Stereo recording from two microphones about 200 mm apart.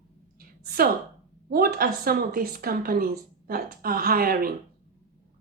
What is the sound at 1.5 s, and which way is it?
A woman's voice, 45° right (ahead or behind).